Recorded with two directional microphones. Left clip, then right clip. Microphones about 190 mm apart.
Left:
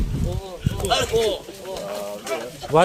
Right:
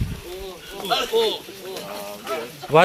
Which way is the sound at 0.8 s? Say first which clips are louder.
Even; 25° left (ahead or behind).